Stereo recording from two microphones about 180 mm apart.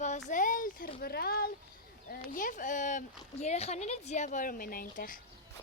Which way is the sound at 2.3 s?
50° left (ahead or behind).